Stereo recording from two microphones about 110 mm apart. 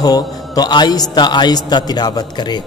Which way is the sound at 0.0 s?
35° left (ahead or behind).